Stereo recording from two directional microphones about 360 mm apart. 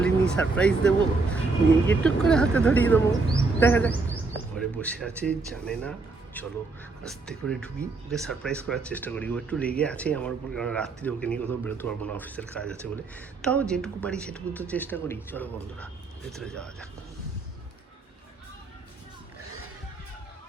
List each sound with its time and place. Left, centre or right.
0.0 s speech: centre